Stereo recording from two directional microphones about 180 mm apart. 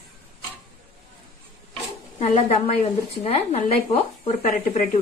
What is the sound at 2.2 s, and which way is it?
Speech, 35° left (ahead or behind).